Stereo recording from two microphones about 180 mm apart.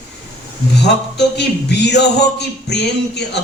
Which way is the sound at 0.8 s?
70° left (ahead or behind).